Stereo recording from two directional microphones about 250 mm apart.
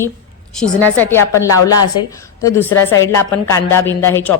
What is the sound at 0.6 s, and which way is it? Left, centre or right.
A woman's voice, centre.